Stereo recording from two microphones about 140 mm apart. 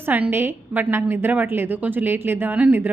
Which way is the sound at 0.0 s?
15° right (ahead or behind).